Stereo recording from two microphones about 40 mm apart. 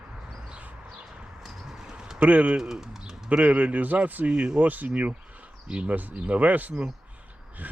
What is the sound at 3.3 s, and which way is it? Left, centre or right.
Speech, right.